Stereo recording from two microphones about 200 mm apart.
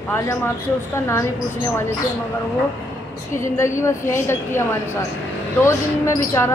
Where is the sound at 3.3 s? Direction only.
15° left (ahead or behind).